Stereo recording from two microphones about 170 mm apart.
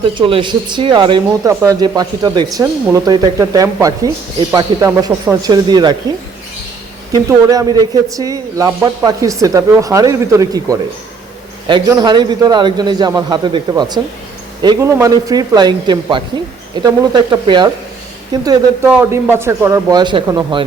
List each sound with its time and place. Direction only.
0.1 s speech: 30° right (ahead or behind)
7.1 s speech: 20° right (ahead or behind)
18.4 s speech: 15° right (ahead or behind)